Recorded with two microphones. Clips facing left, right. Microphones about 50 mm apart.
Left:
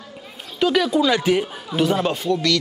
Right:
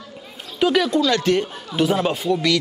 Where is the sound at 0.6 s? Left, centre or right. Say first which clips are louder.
Right 1 dB; centre.